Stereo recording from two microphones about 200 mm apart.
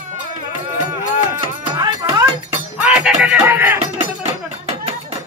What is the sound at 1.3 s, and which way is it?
Music, 20° right (ahead or behind).